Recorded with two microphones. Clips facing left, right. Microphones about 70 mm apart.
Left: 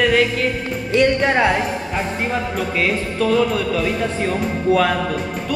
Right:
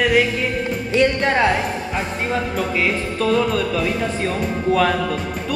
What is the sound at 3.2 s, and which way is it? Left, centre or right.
Speech, centre.